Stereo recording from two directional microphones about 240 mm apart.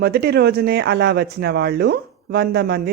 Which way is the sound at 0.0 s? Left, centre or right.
Right.